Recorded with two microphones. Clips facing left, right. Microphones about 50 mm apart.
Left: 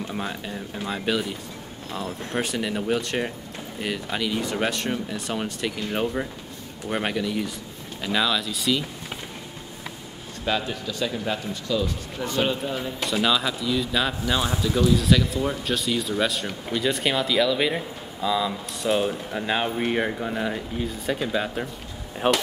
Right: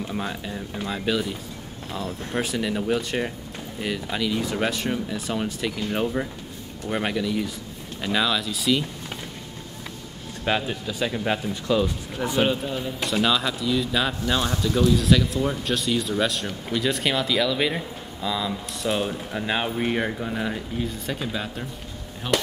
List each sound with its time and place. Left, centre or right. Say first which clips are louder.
0.0 s speech: right 1 dB; centre
10.7 s speech: right 1 dB; centre
12.6 s speech: even; centre
22.2 s speech: left 3 dB; left